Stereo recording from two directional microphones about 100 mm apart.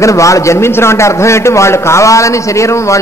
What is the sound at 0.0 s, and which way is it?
A man's voice, 30° left (ahead or behind).